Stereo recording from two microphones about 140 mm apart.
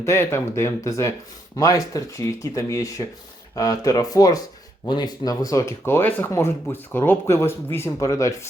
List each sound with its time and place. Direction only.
0.0 s speech: 20° left (ahead or behind)